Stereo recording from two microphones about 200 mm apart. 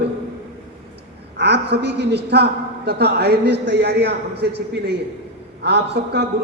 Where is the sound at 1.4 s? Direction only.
55° right (ahead or behind).